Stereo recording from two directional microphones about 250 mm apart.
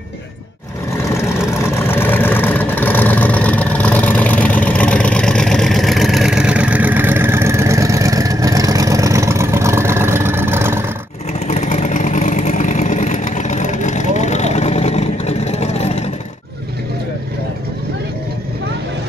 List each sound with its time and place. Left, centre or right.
1.1 s vehicle: centre
11.4 s vehicle: left